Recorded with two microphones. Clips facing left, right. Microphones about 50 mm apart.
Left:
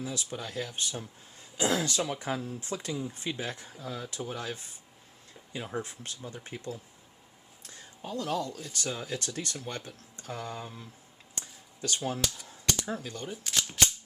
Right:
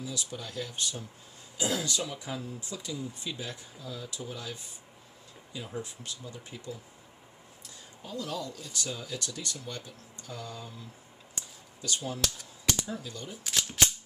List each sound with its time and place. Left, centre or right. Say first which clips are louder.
0.0 s speech: left 2 dB; left
1.5 s speech: left 3 dB; left
5.7 s speech: left 2 dB; left
11.3 s a sound: left 3 dB; left
12.2 s typing: even; centre
12.9 s speech: left 3 dB; left
13.3 s speech: right 1 dB; centre